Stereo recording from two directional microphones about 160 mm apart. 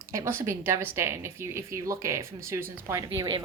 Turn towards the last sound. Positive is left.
turn(degrees=-25)  # may be behind; listen again after turning